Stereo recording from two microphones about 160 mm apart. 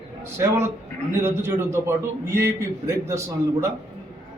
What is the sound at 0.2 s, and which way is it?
A man's voice, 15° right (ahead or behind).